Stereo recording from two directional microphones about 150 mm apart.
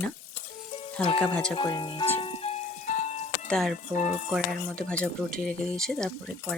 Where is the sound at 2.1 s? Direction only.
40° left (ahead or behind).